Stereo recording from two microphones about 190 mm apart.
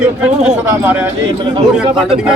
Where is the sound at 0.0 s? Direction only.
5° right (ahead or behind).